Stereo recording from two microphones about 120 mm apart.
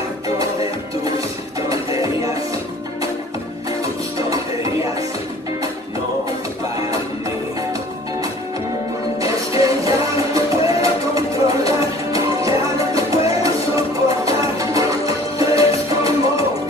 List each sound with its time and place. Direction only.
1.7 s music: 30° right (ahead or behind)
9.2 s music: 30° right (ahead or behind)